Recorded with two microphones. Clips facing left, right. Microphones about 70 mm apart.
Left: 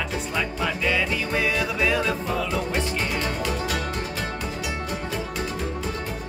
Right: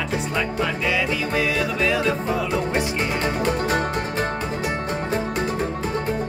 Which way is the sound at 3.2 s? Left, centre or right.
Right.